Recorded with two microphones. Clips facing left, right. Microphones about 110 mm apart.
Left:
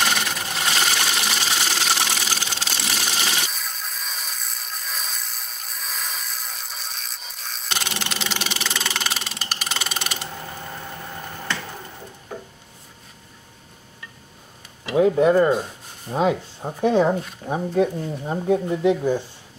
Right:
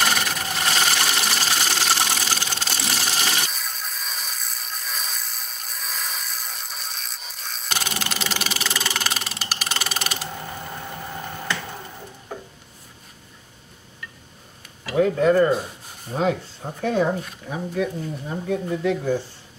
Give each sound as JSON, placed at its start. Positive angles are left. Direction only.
{"t": 0.1, "sound": "sewing machine", "side_deg": 0}
{"t": 14.9, "sound": "speech", "side_deg": 20}
{"t": 17.5, "sound": "speech", "side_deg": 35}
{"t": 18.7, "sound": "speech", "side_deg": 20}